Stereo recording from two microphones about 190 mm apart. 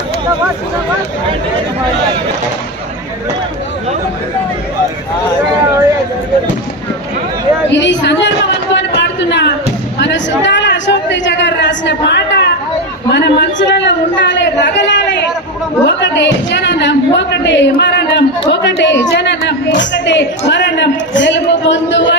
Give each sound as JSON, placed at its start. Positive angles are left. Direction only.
{"t": 7.7, "sound": "speech", "side_deg": 70}
{"t": 8.7, "sound": "a sound", "side_deg": 70}
{"t": 10.0, "sound": "a woman's voice", "side_deg": 70}